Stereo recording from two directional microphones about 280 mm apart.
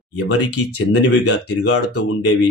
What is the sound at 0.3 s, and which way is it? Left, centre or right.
Speech, left.